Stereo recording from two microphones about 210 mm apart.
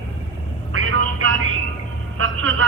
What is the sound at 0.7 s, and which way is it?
Vehicle, 70° right (ahead or behind).